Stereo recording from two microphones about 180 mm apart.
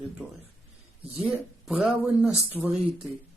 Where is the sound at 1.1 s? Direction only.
Centre (ahead or behind).